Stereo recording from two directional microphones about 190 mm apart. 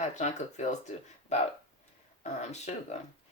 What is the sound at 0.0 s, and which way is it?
Speech, 40° left (ahead or behind).